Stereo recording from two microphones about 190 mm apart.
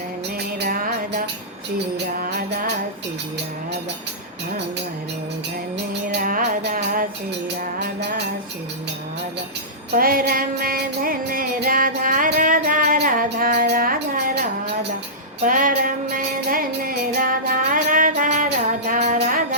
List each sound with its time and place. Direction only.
0.6 s music: 50° right (ahead or behind)
6.1 s music: 45° right (ahead or behind)
9.9 s music: 50° right (ahead or behind)
15.4 s music: 45° right (ahead or behind)